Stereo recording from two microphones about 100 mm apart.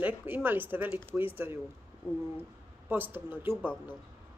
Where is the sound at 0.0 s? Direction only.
20° right (ahead or behind).